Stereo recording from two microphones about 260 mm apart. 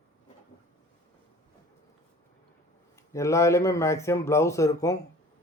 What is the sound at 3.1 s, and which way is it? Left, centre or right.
Speech, centre.